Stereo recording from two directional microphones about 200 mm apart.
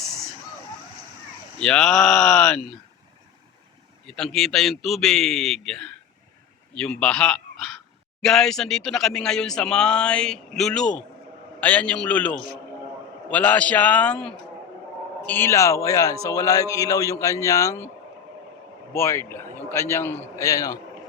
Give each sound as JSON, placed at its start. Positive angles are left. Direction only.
{"t": 1.5, "sound": "speech", "side_deg": 5}
{"t": 4.0, "sound": "a man's voice", "side_deg": 5}
{"t": 18.9, "sound": "a man's voice", "side_deg": 15}